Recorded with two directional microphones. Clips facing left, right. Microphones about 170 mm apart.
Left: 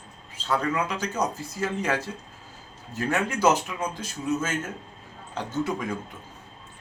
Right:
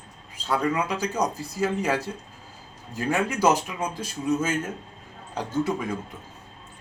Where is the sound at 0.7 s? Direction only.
10° right (ahead or behind).